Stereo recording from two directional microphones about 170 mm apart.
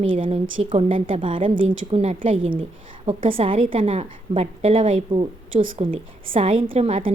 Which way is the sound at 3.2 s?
35° right (ahead or behind).